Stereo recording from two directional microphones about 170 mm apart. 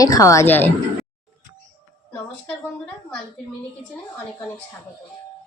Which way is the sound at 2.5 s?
5° left (ahead or behind).